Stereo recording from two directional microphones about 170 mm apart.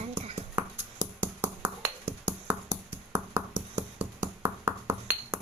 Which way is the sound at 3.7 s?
10° right (ahead or behind).